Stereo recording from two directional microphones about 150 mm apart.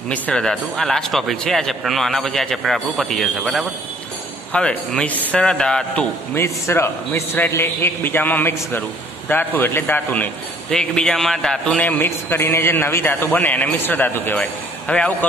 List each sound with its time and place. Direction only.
0.1 s a man's voice: 5° left (ahead or behind)
6.3 s a man's voice: 15° left (ahead or behind)